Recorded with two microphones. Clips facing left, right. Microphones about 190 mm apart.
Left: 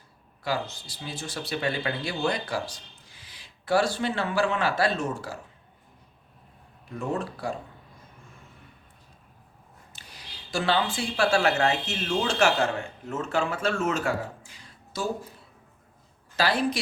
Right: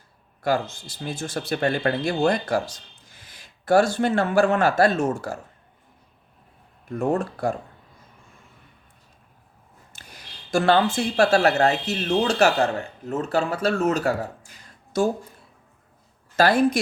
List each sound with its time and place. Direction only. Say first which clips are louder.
0.4 s speech: right 6 dB; 50° right (ahead or behind)
7.0 s speech: right 7 dB; 50° right (ahead or behind)
9.9 s speech: right 2 dB; 50° right (ahead or behind)
16.4 s speech: right 7 dB; 50° right (ahead or behind)